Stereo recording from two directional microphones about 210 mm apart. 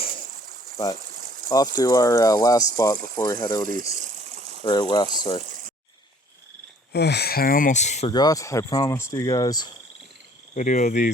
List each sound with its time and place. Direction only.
1.5 s speech: 15° left (ahead or behind)
3.7 s a sound: 40° right (ahead or behind)
4.6 s speech: 20° left (ahead or behind)
5.5 s a sound: 40° right (ahead or behind)
6.9 s speech: 50° left (ahead or behind); by 8.1 s 35° left (ahead or behind)
8.1 s speech: 20° left (ahead or behind)
10.5 s cricket: 35° left (ahead or behind)